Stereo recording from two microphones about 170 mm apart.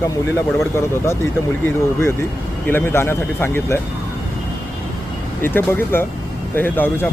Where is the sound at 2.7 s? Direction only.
15° left (ahead or behind).